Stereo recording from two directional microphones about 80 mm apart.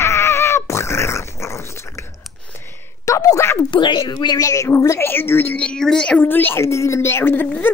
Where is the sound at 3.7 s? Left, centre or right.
Left.